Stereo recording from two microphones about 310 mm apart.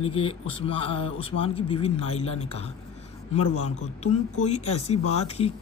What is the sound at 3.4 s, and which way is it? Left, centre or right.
Speech, left.